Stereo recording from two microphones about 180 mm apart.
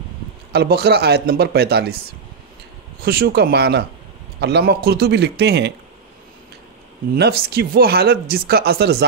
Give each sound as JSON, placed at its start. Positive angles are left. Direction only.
{"t": 0.5, "sound": "speech", "side_deg": -65}
{"t": 3.0, "sound": "a man's voice", "side_deg": -60}
{"t": 7.2, "sound": "speech", "side_deg": -60}